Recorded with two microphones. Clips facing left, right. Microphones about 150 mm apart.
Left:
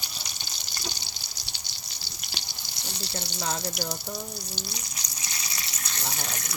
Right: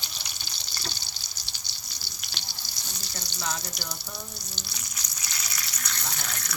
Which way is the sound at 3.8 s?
25° left (ahead or behind).